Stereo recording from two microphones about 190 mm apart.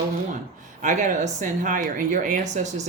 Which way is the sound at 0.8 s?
40° right (ahead or behind).